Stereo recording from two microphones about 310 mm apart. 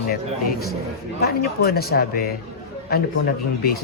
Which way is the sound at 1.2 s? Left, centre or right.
Left.